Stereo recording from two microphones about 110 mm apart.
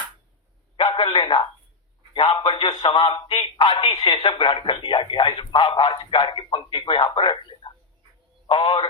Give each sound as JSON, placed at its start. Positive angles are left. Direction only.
{"t": 0.8, "sound": "a sound", "side_deg": 40}
{"t": 1.1, "sound": "speech", "side_deg": 45}
{"t": 2.4, "sound": "a sound", "side_deg": 40}
{"t": 2.8, "sound": "a man's voice", "side_deg": 40}
{"t": 4.2, "sound": "speech", "side_deg": 55}
{"t": 4.4, "sound": "a man's voice", "side_deg": 40}